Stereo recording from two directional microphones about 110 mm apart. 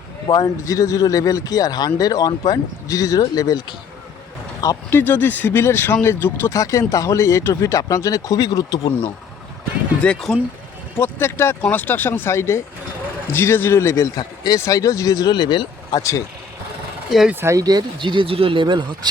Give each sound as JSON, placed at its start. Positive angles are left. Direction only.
{"t": 0.3, "sound": "speech", "side_deg": 35}
{"t": 4.9, "sound": "speech", "side_deg": 20}
{"t": 10.0, "sound": "speech", "side_deg": 5}
{"t": 10.9, "sound": "speech", "side_deg": 20}
{"t": 17.1, "sound": "speech", "side_deg": 0}
{"t": 17.4, "sound": "speech", "side_deg": -30}